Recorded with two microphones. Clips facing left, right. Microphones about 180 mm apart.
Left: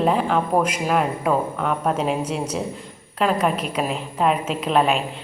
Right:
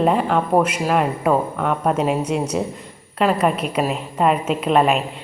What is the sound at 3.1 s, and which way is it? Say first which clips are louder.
A woman's voice: right 2 dB; 5° right (ahead or behind).